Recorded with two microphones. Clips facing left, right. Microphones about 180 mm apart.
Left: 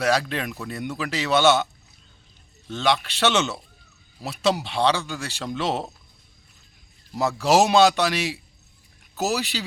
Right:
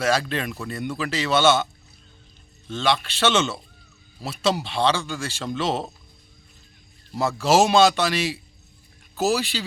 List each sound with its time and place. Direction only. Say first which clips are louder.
0.0 s a man's voice: even; 10° left (ahead or behind)
2.6 s a man's voice: even; 15° left (ahead or behind)
7.3 s a man's voice: even; 15° left (ahead or behind)